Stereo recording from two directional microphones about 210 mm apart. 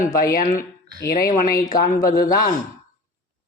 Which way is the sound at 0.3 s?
40° left (ahead or behind).